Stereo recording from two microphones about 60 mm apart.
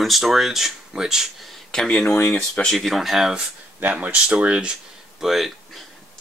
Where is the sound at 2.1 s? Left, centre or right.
Left.